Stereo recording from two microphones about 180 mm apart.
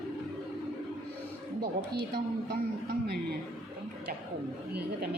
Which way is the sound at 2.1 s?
70° right (ahead or behind).